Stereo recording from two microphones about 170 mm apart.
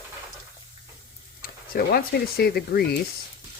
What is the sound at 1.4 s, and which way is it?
Speech, 60° left (ahead or behind).